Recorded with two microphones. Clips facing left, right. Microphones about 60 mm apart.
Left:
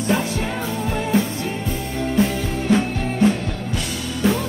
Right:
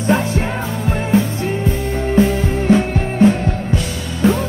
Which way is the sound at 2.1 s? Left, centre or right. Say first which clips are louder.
Right 6 dB; right.